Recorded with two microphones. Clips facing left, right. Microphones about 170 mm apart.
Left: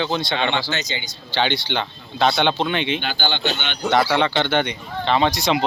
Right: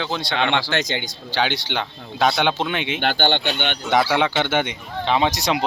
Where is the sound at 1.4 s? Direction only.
5° right (ahead or behind).